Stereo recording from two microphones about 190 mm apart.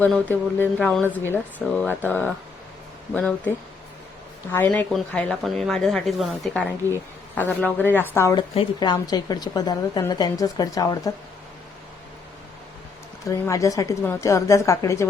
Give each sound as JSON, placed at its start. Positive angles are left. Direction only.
{"t": 0.0, "sound": "a woman's voice", "side_deg": 10}
{"t": 4.5, "sound": "speech", "side_deg": 10}
{"t": 6.8, "sound": "a woman's voice", "side_deg": 10}
{"t": 13.2, "sound": "a woman's voice", "side_deg": 15}